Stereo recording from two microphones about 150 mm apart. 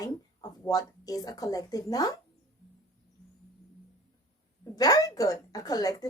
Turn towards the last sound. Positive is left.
turn(degrees=25)  # may be behind; listen again after turning